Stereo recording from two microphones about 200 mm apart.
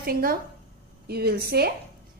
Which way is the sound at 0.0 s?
50° right (ahead or behind).